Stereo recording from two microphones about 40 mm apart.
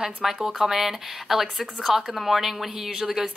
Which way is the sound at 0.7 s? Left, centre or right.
Centre.